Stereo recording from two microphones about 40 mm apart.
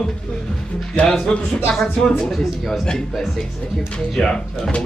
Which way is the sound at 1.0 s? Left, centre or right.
Centre.